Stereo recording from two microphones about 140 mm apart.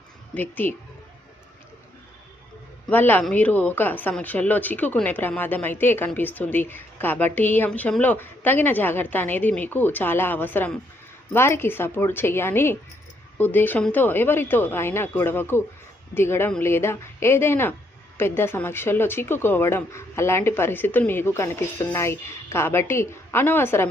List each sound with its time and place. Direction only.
0.3 s speech: 10° left (ahead or behind)
2.9 s speech: 10° left (ahead or behind)